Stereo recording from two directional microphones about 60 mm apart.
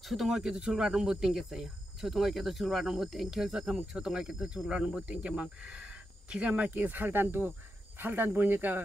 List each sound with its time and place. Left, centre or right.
0.0 s speech: centre; by 8.8 s right